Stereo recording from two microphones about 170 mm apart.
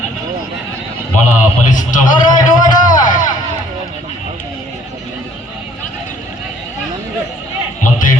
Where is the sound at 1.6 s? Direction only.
50° left (ahead or behind).